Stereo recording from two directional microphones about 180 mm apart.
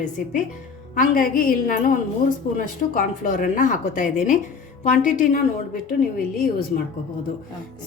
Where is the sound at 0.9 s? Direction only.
45° left (ahead or behind).